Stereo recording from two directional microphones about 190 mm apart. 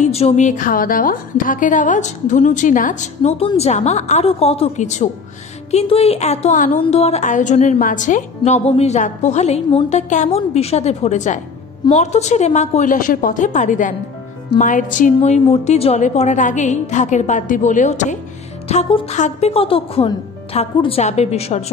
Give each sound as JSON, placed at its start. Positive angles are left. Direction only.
{"t": 0.0, "sound": "a woman's voice", "side_deg": 35}